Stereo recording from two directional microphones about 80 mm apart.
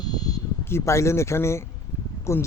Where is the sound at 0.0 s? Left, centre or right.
Left.